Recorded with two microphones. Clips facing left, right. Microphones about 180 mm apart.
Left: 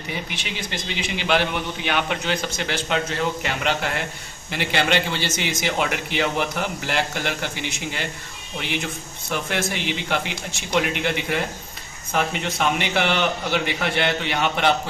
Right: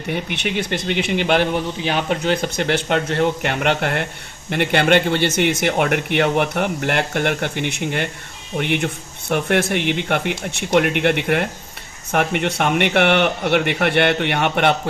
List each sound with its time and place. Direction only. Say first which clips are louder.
0.1 s speech: right 9 dB; 60° right (ahead or behind)
1.8 s a man's voice: right 4 dB; 35° right (ahead or behind)
2.2 s speech: right 6 dB; 50° right (ahead or behind)